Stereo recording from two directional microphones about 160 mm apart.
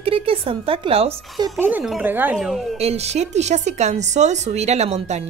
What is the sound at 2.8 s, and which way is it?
A woman's voice, 40° right (ahead or behind).